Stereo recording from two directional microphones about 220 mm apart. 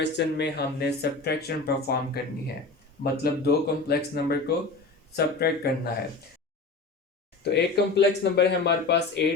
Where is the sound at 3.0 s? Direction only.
45° left (ahead or behind).